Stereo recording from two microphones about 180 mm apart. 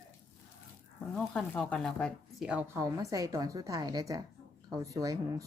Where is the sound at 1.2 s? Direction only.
5° left (ahead or behind).